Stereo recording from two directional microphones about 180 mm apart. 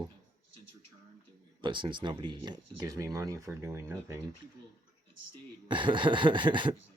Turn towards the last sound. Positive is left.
turn(degrees=-25)  # may be behind; listen again after turning